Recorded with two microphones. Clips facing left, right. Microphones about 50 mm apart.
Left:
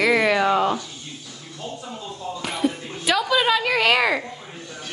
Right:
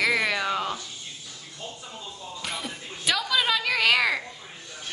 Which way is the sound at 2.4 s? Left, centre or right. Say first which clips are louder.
Left 10 dB; centre.